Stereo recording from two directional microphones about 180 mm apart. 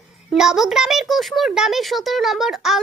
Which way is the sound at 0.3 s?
Centre (ahead or behind).